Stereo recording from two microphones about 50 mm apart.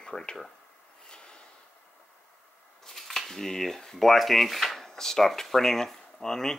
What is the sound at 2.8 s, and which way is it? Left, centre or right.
Scissors, centre.